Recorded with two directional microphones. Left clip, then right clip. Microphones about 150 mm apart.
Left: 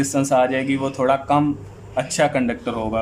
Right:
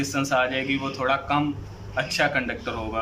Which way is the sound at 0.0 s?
40° left (ahead or behind).